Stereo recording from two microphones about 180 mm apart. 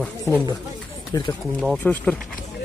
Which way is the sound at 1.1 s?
20° left (ahead or behind).